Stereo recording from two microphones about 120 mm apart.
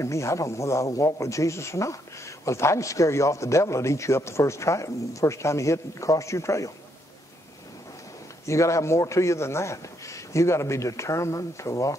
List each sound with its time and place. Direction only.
0.0 s speech: 25° left (ahead or behind)
8.5 s speech: 25° left (ahead or behind)